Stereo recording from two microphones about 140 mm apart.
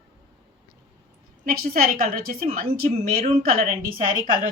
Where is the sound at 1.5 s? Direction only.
90° right.